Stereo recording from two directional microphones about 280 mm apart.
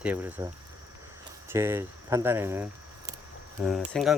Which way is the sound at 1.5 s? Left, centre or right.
Centre.